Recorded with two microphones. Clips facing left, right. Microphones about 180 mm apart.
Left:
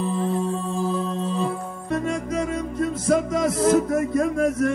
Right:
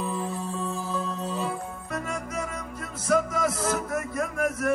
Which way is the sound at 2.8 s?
30° left (ahead or behind).